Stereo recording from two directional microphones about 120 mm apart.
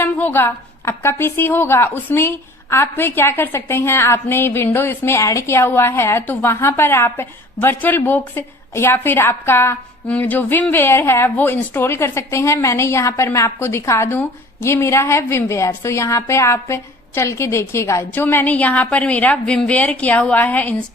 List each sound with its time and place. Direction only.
0.0 s a woman's voice: 15° left (ahead or behind)